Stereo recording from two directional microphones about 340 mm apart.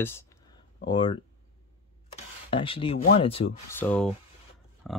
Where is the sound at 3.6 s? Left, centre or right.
Centre.